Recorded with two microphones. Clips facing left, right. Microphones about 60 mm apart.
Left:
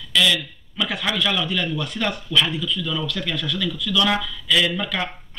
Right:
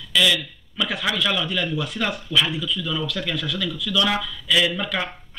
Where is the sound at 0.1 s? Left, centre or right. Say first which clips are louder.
Even; centre.